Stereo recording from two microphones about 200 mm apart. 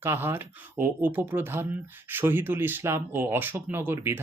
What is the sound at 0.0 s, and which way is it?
Speech, 10° right (ahead or behind).